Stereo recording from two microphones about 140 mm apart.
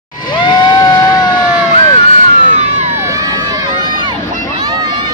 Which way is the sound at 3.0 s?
25° right (ahead or behind).